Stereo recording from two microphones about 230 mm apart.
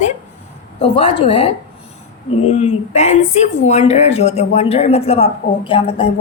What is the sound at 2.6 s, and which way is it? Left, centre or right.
A woman's voice, left.